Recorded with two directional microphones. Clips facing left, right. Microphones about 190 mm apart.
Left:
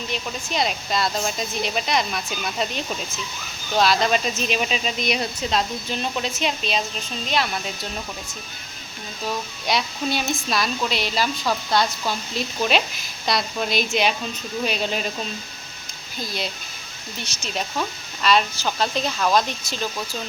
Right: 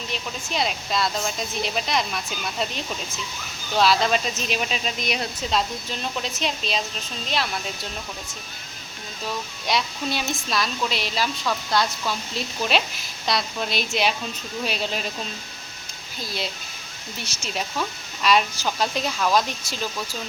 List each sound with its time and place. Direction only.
0.1 s a woman's voice: centre (ahead or behind)
3.8 s a woman's voice: centre (ahead or behind)
9.6 s a woman's voice: centre (ahead or behind)
11.4 s speech: 25° left (ahead or behind)
13.2 s a woman's voice: centre (ahead or behind)
16.2 s a woman's voice: centre (ahead or behind)